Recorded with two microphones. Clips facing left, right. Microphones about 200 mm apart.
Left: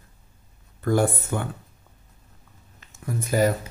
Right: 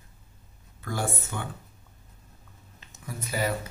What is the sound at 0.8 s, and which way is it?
Speech, 50° left (ahead or behind).